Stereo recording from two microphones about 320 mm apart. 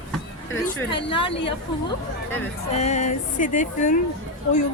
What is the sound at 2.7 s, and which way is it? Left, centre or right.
Speech, left.